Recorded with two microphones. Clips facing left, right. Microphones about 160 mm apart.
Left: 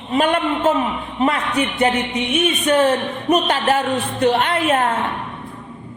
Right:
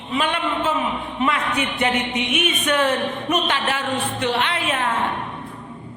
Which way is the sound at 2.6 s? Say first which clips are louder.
Left 4 dB; 35° left (ahead or behind).